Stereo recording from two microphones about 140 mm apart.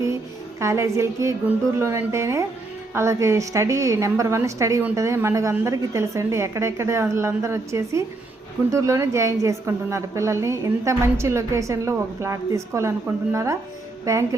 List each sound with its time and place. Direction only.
0.6 s a woman's voice: 20° right (ahead or behind)